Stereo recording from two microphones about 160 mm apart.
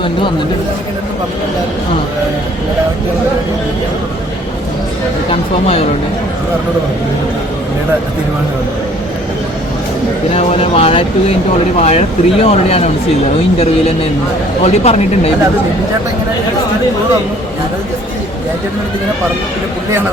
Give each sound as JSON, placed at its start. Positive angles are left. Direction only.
{"t": 5.3, "sound": "speech", "side_deg": 40}
{"t": 10.3, "sound": "speech", "side_deg": 35}
{"t": 14.6, "sound": "speech", "side_deg": 40}